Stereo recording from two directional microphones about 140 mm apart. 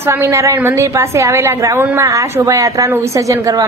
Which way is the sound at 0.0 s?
20° right (ahead or behind).